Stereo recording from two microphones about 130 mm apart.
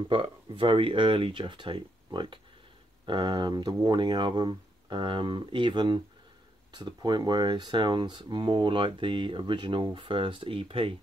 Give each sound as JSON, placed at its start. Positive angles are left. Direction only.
{"t": 0.1, "sound": "speech", "side_deg": -40}